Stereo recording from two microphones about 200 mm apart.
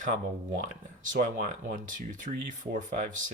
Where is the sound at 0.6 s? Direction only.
40° right (ahead or behind).